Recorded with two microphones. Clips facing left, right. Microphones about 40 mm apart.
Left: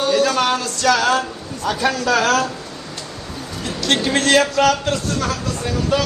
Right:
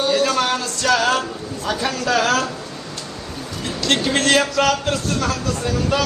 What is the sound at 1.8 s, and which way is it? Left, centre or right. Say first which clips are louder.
Speech: left 2 dB; left.